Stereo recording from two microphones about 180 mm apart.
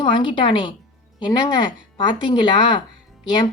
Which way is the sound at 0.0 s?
25° left (ahead or behind).